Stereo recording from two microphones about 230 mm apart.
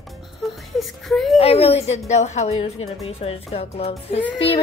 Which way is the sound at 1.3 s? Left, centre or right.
Left.